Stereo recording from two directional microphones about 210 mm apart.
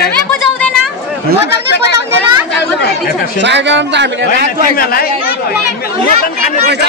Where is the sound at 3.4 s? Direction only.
55° right (ahead or behind).